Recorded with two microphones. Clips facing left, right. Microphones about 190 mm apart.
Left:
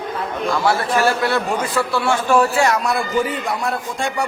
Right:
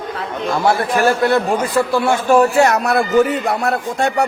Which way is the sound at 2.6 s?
65° right (ahead or behind).